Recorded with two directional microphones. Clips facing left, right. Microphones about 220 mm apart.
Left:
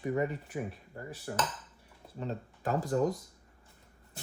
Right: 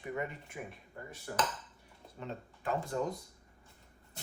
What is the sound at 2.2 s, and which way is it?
Speech, 40° left (ahead or behind).